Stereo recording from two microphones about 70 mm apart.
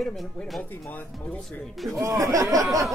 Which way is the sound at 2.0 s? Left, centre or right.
Right.